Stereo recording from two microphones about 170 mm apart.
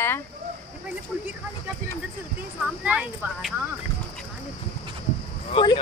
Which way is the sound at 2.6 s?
5° right (ahead or behind).